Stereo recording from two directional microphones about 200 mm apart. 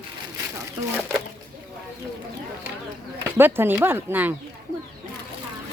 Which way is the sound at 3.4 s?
10° right (ahead or behind).